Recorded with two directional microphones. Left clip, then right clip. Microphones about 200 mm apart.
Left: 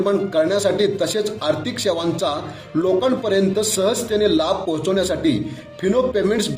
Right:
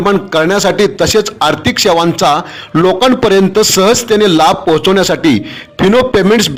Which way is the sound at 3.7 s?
45° right (ahead or behind).